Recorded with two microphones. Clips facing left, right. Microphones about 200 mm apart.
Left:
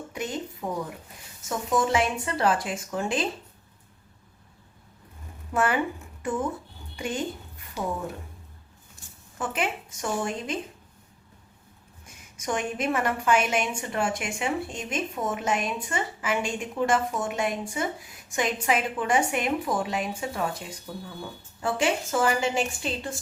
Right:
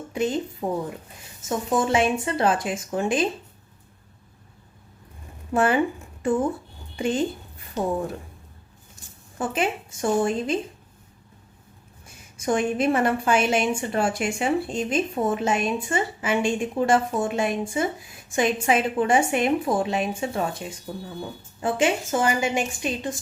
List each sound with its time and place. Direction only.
0.1 s a woman's voice: 30° right (ahead or behind)
5.5 s a woman's voice: 25° right (ahead or behind)
9.4 s a woman's voice: 25° right (ahead or behind)
12.4 s a woman's voice: 30° right (ahead or behind)